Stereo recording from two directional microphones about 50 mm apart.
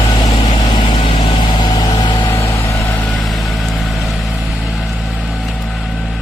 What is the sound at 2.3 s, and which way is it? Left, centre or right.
Vehicle, left.